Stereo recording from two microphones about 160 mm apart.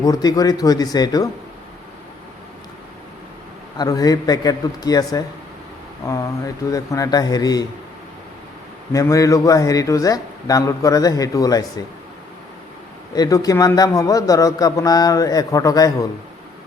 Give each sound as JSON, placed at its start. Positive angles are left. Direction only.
{"t": 0.0, "sound": "a man's voice", "side_deg": 25}
{"t": 3.8, "sound": "a man's voice", "side_deg": 25}
{"t": 8.9, "sound": "a man's voice", "side_deg": 20}
{"t": 13.1, "sound": "a man's voice", "side_deg": 25}